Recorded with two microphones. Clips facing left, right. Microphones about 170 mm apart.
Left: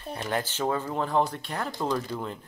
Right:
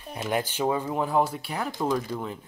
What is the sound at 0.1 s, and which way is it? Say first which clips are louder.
Speech: right 2 dB; 10° right (ahead or behind).